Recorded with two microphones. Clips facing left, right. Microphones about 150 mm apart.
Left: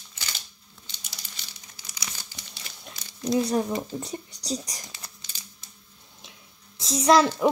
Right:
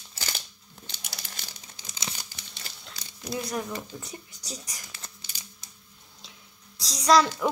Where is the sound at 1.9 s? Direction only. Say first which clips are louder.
Right 3 dB; 25° right (ahead or behind).